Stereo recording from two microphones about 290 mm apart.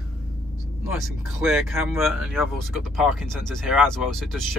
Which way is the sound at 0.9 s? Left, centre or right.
Centre.